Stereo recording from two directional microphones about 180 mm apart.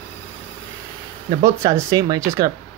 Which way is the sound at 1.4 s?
20° right (ahead or behind).